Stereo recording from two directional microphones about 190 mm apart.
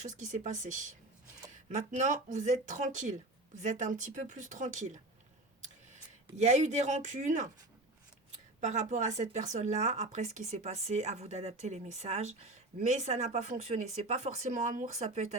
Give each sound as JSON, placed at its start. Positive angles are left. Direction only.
{"t": 0.0, "sound": "speech", "side_deg": -40}
{"t": 6.3, "sound": "speech", "side_deg": -35}
{"t": 8.6, "sound": "speech", "side_deg": -40}